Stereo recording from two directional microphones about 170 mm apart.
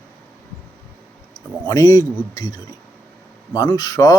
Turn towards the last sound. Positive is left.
turn(degrees=20)  # may be behind; listen again after turning